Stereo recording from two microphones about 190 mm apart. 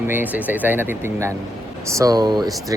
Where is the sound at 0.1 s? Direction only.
10° right (ahead or behind).